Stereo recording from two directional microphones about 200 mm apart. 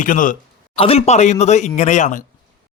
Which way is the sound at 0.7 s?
30° left (ahead or behind).